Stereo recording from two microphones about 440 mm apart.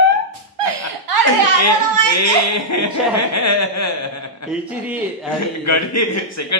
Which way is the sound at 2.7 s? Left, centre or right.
Left.